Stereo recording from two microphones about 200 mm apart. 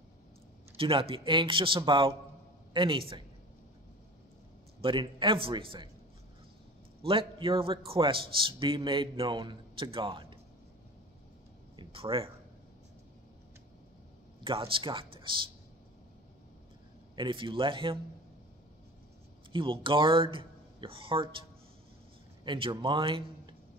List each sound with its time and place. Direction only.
0.7 s a man's voice: 25° right (ahead or behind)
4.8 s a man's voice: 25° right (ahead or behind)
7.0 s a man's voice: 25° right (ahead or behind)
11.7 s speech: 25° right (ahead or behind)
14.4 s a man's voice: 25° right (ahead or behind)
17.1 s a man's voice: 25° right (ahead or behind)
19.5 s a man's voice: 25° right (ahead or behind)